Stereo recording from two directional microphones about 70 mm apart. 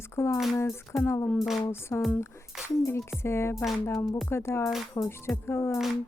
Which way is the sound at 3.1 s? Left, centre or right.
Left.